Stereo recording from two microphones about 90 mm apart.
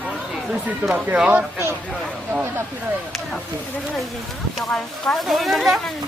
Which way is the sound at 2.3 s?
15° right (ahead or behind).